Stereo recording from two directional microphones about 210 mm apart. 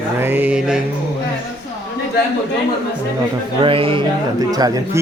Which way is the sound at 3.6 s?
25° right (ahead or behind).